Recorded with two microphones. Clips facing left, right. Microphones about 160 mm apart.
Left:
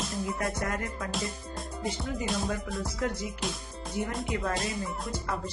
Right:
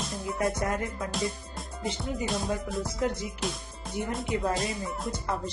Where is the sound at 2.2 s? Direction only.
Centre (ahead or behind).